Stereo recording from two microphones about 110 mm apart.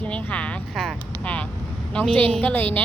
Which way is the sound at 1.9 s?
10° left (ahead or behind).